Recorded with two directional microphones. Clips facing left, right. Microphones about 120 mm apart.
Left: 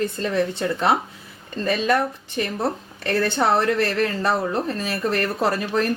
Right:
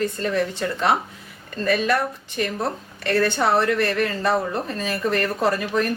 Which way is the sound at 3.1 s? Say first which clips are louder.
Even; 30° left (ahead or behind).